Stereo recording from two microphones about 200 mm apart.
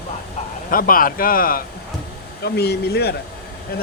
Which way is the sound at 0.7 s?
45° left (ahead or behind).